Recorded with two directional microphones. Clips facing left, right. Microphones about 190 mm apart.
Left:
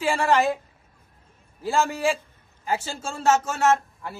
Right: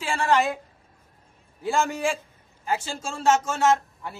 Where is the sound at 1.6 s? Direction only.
Centre (ahead or behind).